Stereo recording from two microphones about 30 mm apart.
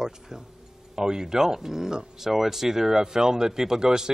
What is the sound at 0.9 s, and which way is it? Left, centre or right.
A man's voice, centre.